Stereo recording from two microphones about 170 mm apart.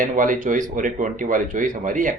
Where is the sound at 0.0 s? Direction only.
50° right (ahead or behind).